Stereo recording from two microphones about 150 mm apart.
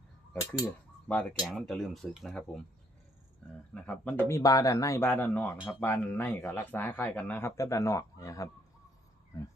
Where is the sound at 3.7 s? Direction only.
10° left (ahead or behind).